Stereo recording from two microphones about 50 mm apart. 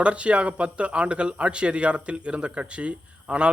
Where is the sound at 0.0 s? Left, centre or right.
Right.